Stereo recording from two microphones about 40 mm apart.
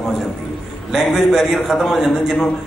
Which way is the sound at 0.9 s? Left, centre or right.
Centre.